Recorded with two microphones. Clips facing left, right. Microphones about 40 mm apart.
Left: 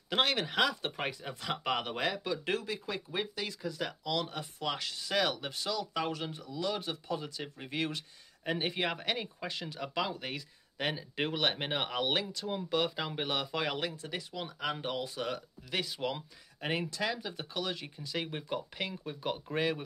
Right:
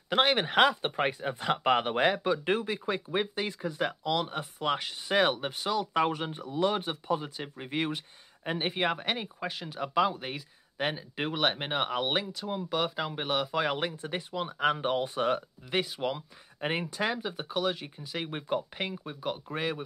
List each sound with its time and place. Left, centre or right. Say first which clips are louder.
0.1 s speech: right 5 dB; right
0.5 s speech: right 6 dB; right; by 13.7 s centre
13.7 s speech: right 4 dB; right
15.8 s speech: right 1 dB; centre
16.9 s speech: right 4 dB; right
17.2 s speech: right 6 dB; centre
19.0 s speech: right 1 dB; centre